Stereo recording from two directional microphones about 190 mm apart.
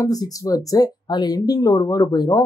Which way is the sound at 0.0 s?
20° left (ahead or behind).